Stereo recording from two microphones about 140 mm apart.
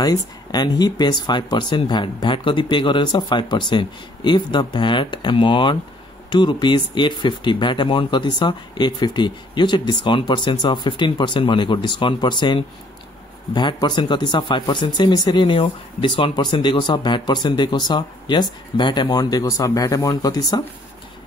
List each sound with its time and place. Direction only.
0.0 s speech: 30° left (ahead or behind)